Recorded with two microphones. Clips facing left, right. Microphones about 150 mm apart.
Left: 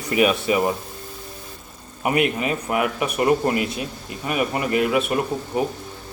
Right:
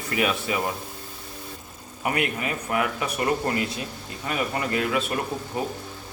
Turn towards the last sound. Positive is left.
turn(degrees=20)  # may be behind; listen again after turning